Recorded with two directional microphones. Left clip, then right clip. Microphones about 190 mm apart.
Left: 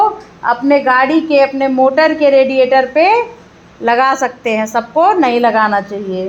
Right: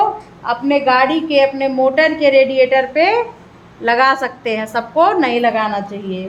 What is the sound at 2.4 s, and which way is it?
A woman's voice, 15° left (ahead or behind).